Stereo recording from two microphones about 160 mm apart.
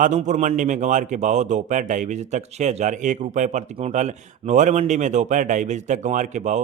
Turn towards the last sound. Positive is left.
turn(degrees=-45)  # may be behind; listen again after turning